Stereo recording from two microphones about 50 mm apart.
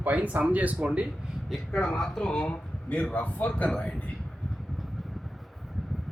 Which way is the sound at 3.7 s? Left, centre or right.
Centre.